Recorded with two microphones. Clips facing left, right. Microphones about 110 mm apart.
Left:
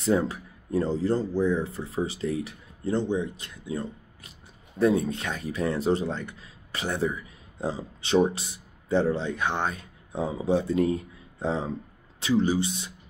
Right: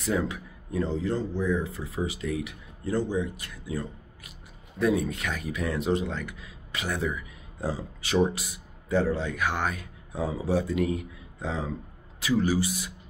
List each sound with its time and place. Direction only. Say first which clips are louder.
0.0 s speech: left 4 dB; 30° left (ahead or behind)